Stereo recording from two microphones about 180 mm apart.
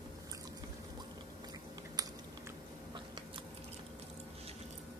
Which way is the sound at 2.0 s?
20° right (ahead or behind).